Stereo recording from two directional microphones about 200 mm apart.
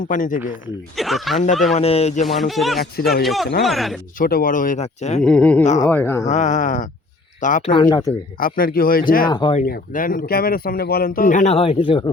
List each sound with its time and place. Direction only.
0.0 s speech: 40° left (ahead or behind)
0.9 s speech: centre (ahead or behind)
1.7 s speech: 30° left (ahead or behind)
2.2 s speech: centre (ahead or behind)
4.2 s speech: 45° left (ahead or behind)
5.2 s speech: 5° left (ahead or behind)
5.6 s speech: 35° left (ahead or behind)
5.9 s speech: 10° left (ahead or behind)
6.2 s speech: 35° left (ahead or behind)
7.7 s speech: 25° left (ahead or behind)
8.4 s speech: 45° left (ahead or behind)
9.2 s speech: 25° left (ahead or behind)
9.6 s speech: 45° left (ahead or behind); by 12.1 s 25° left (ahead or behind)